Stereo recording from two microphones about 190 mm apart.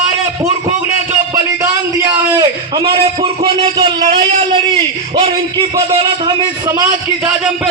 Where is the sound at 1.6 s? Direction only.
20° right (ahead or behind).